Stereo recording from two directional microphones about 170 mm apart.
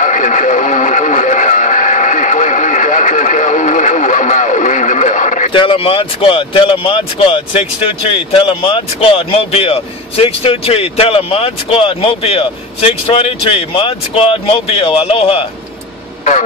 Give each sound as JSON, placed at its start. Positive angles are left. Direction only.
{"t": 0.0, "sound": "radio", "side_deg": 45}
{"t": 5.5, "sound": "speech", "side_deg": 30}